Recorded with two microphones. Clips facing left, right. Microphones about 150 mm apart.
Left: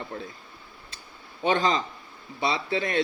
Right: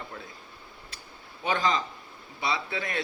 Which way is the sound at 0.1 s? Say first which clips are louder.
Left 6 dB; 40° left (ahead or behind).